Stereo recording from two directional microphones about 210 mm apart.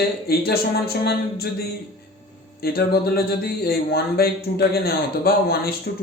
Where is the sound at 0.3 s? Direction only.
45° left (ahead or behind).